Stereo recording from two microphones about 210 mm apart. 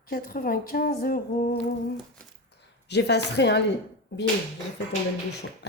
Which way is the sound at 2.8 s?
55° left (ahead or behind).